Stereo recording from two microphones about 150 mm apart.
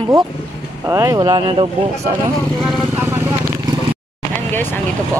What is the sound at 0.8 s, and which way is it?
Speech, 20° right (ahead or behind).